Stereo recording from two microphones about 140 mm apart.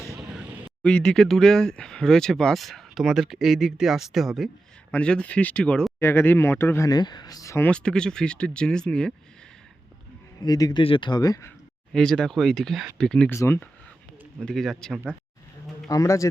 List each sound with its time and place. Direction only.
0.3 s a sound: 10° right (ahead or behind)
0.8 s speech: 5° left (ahead or behind)
6.0 s speech: 15° left (ahead or behind)
7.7 s speech: 5° left (ahead or behind)
10.4 s speech: 30° left (ahead or behind)
11.9 s speech: 5° left (ahead or behind)
13.3 s speech: 20° left (ahead or behind)
14.3 s speech: centre (ahead or behind)
15.9 s speech: 25° left (ahead or behind)